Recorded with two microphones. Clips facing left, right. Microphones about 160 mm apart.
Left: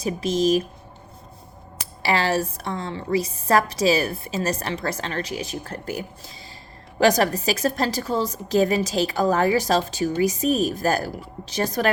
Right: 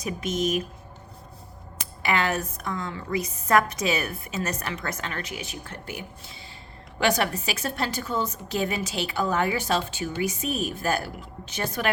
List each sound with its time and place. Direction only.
0.0 s a woman's voice: 30° left (ahead or behind)
2.0 s a woman's voice: 30° left (ahead or behind)